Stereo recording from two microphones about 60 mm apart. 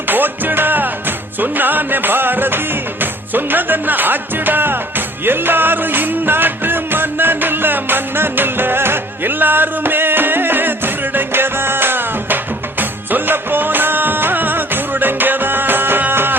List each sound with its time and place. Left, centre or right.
0.1 s music: right